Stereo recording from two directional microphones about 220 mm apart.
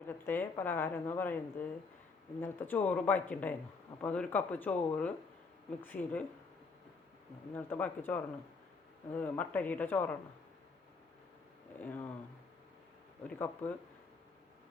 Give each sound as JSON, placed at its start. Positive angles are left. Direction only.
{"t": 0.1, "sound": "a woman's voice", "side_deg": 10}
{"t": 7.5, "sound": "a woman's voice", "side_deg": 10}
{"t": 11.8, "sound": "a woman's voice", "side_deg": 10}
{"t": 13.2, "sound": "a woman's voice", "side_deg": 5}